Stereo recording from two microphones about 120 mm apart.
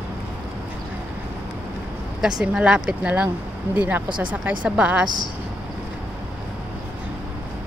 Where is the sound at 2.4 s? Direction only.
5° right (ahead or behind).